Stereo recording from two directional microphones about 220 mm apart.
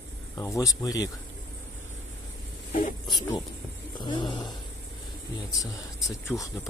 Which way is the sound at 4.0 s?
20° left (ahead or behind).